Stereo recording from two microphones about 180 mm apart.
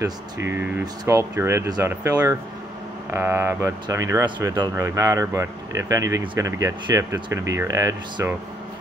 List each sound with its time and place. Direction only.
0.0 s speech: 15° right (ahead or behind)